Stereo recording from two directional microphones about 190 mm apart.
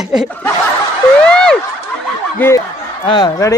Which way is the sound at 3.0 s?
25° left (ahead or behind).